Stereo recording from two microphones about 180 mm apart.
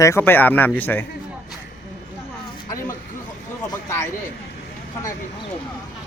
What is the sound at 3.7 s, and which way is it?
Speech, 15° left (ahead or behind).